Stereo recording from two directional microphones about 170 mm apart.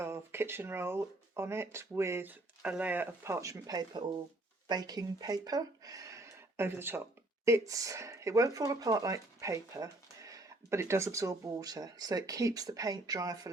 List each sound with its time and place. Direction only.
0.0 s speech: 15° right (ahead or behind)